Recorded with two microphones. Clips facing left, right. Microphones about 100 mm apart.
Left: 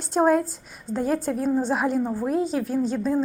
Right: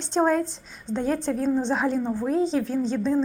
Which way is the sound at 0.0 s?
5° left (ahead or behind).